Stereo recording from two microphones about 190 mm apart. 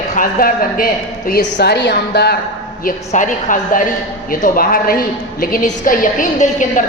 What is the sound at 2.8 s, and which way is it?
A woman's voice, 45° left (ahead or behind).